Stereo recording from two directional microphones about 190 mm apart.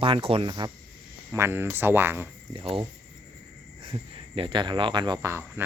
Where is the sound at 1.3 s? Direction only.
10° right (ahead or behind).